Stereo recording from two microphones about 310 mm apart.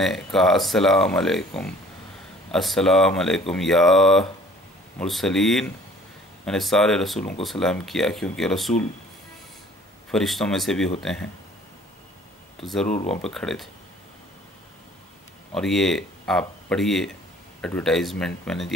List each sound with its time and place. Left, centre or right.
0.0 s speech: centre
10.1 s speech: centre
12.5 s speech: centre
12.8 s speech: left
13.2 s speech: centre
15.5 s speech: centre